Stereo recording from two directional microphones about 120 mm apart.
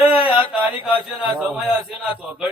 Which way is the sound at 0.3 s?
45° left (ahead or behind).